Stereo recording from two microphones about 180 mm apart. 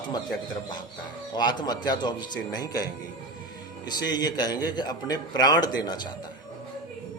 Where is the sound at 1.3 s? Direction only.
25° left (ahead or behind).